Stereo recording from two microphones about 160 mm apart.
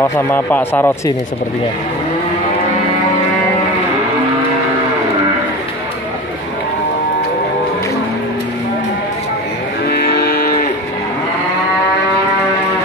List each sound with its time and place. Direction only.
0.0 s speech: 15° left (ahead or behind)
9.8 s music: 75° left (ahead or behind)